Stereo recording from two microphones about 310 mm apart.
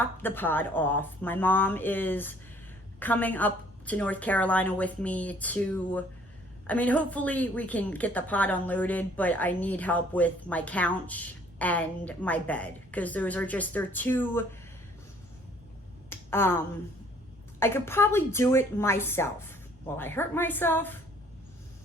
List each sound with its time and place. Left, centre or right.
0.0 s a woman's voice: centre
16.0 s finger snapping: centre
17.6 s speech: centre